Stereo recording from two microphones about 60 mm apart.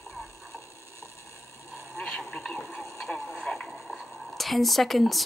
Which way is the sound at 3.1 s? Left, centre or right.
Centre.